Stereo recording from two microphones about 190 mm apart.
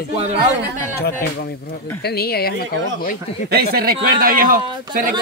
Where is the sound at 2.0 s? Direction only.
55° left (ahead or behind).